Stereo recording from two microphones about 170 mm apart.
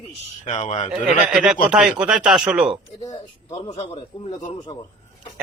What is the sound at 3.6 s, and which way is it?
Speech, 40° left (ahead or behind).